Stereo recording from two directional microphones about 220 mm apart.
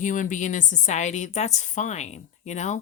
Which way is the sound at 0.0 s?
35° left (ahead or behind).